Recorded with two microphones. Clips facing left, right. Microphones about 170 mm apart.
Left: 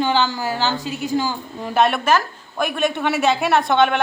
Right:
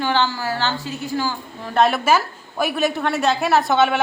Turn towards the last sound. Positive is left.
turn(degrees=-5)  # may be behind; listen again after turning